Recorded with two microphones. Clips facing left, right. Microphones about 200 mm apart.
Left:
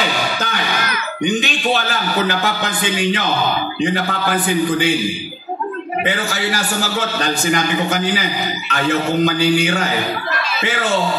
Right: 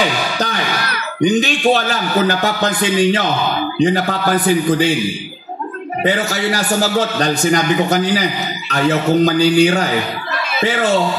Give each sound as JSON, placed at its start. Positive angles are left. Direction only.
{"t": 0.4, "sound": "a man's voice", "side_deg": -35}
{"t": 6.0, "sound": "a man's voice", "side_deg": -40}